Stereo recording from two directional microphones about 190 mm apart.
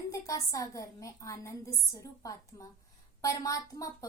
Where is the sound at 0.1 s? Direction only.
15° left (ahead or behind).